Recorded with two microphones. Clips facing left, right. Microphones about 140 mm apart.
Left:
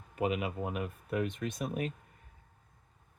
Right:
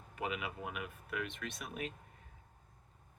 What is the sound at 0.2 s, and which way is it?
Speech, 30° left (ahead or behind).